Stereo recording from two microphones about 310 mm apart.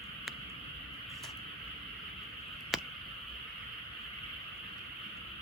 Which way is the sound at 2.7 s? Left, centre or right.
Centre.